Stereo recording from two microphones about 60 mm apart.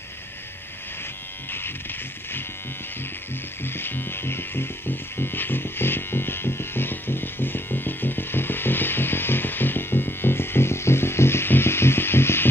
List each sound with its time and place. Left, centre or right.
1.5 s music: left
3.6 s music: left